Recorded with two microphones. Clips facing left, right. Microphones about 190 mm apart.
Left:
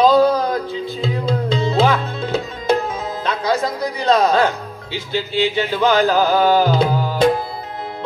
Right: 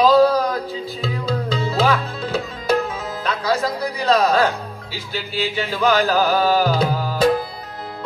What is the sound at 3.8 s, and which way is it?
Speech, 25° left (ahead or behind).